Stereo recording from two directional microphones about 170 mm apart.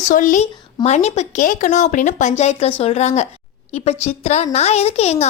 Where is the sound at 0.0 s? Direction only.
50° left (ahead or behind).